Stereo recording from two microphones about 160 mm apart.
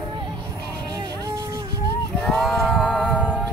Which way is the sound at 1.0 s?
25° right (ahead or behind).